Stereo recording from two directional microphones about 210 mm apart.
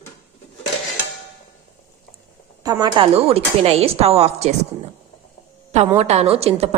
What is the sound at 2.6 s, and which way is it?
A woman's voice, 20° right (ahead or behind).